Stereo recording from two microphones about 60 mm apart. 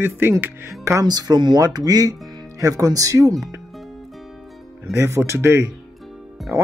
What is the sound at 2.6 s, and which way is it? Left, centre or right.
Speech, right.